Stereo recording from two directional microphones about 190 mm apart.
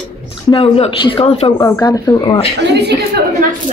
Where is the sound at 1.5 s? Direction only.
15° left (ahead or behind).